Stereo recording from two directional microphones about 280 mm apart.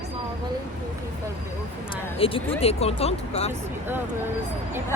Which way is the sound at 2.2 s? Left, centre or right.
Centre.